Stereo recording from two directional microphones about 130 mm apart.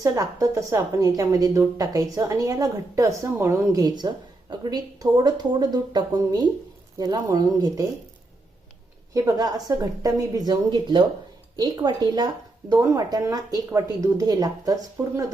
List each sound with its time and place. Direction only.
0.0 s a woman's voice: 30° right (ahead or behind)
9.1 s a woman's voice: 25° right (ahead or behind)